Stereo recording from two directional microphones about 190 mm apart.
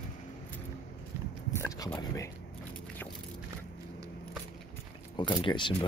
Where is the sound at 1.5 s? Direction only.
20° left (ahead or behind).